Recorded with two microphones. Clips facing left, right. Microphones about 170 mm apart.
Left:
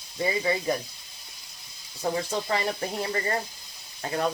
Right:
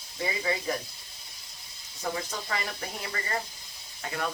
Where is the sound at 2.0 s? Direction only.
30° left (ahead or behind).